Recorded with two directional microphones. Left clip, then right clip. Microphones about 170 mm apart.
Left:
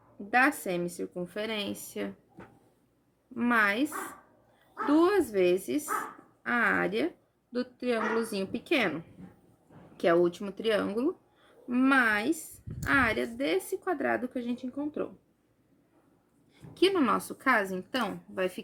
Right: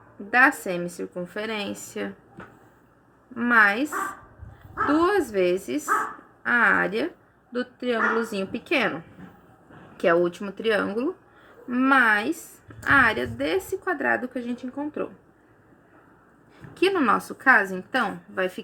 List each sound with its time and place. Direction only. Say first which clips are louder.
0.3 s a woman's voice: right 6 dB; 25° left (ahead or behind)
3.3 s a woman's voice: right 7 dB; 25° left (ahead or behind)
4.9 s a woman's voice: right 3 dB; 25° left (ahead or behind)
10.0 s a woman's voice: right 4 dB; 20° left (ahead or behind)
16.7 s a woman's voice: right 5 dB; 20° left (ahead or behind)